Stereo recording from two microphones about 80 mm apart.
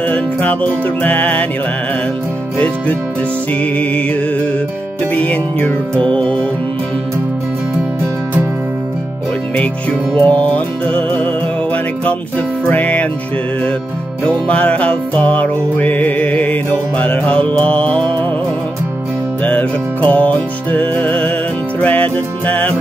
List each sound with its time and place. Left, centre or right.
0.1 s music: centre
3.7 s music: centre
9.6 s music: centre
14.2 s music: centre
19.4 s music: centre